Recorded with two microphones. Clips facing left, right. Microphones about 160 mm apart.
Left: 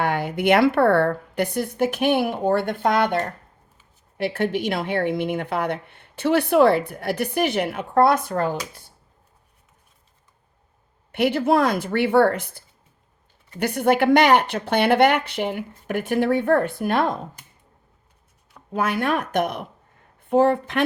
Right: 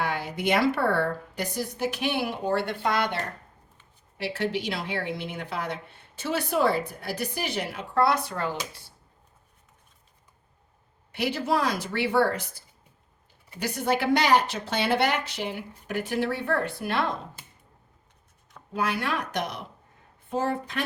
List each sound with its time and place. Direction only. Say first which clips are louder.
0.0 s a woman's voice: left 6 dB; 55° left (ahead or behind)
4.2 s a woman's voice: left 6 dB; 55° left (ahead or behind)
11.1 s a woman's voice: left 7 dB; 55° left (ahead or behind)
18.7 s a woman's voice: left 6 dB; 50° left (ahead or behind)